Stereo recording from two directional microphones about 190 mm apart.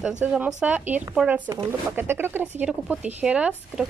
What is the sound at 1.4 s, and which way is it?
Speech, 20° right (ahead or behind).